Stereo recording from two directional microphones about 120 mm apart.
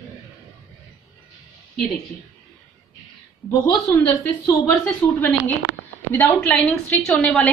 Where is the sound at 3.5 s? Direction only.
25° left (ahead or behind).